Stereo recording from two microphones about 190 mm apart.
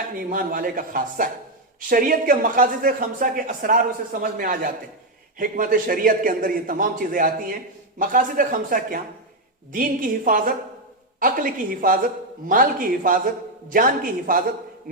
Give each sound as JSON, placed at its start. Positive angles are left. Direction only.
{"t": 0.1, "sound": "a man's voice", "side_deg": -45}